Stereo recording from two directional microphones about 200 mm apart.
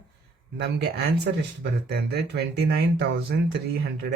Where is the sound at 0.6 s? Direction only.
55° right (ahead or behind).